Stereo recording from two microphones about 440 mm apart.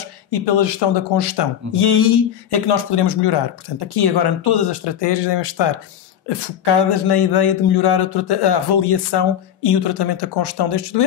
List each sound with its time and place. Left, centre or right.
0.5 s speech: left